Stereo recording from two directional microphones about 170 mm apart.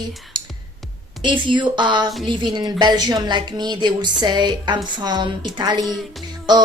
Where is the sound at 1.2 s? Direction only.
30° right (ahead or behind).